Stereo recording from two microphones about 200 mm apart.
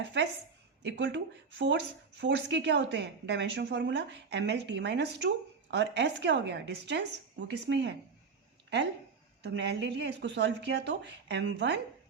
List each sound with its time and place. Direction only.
0.0 s speech: 60° right (ahead or behind)
9.4 s speech: 60° right (ahead or behind)